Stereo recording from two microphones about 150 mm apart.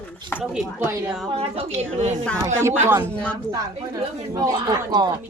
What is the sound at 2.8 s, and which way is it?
Speech, 15° right (ahead or behind).